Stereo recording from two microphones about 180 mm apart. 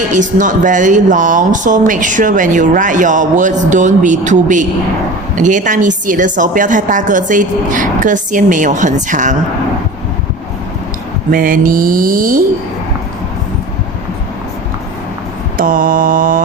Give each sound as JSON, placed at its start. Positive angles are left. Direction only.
{"t": 0.1, "sound": "a woman's voice", "side_deg": -45}
{"t": 11.3, "sound": "a woman's voice", "side_deg": -50}
{"t": 15.5, "sound": "a woman's voice", "side_deg": -50}